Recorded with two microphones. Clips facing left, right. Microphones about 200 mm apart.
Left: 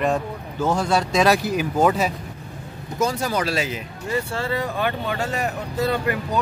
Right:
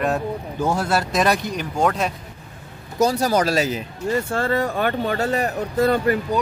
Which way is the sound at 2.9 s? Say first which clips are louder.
Right 4 dB; 40° right (ahead or behind).